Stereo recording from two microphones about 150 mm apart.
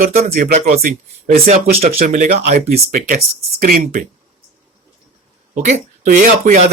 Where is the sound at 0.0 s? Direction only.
75° right (ahead or behind).